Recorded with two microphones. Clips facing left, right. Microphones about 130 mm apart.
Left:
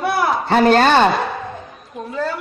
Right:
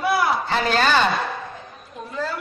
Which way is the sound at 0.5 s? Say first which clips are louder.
Left 9 dB; 55° left (ahead or behind).